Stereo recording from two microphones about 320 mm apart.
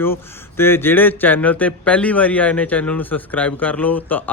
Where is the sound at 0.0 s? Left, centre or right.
Centre.